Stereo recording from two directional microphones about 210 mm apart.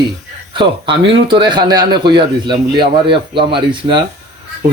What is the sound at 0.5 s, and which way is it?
Speech, 25° right (ahead or behind).